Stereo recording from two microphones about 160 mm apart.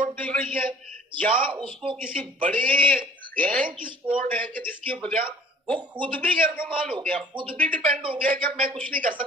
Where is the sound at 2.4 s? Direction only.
60° right (ahead or behind).